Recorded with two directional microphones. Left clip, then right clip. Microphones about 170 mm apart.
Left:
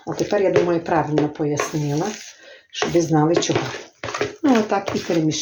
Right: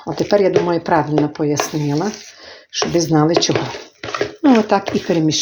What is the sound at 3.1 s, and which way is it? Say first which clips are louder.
Speech: right 5 dB; 50° right (ahead or behind).